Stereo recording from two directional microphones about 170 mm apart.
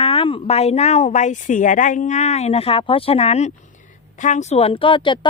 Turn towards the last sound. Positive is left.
turn(degrees=30)  # may be behind; listen again after turning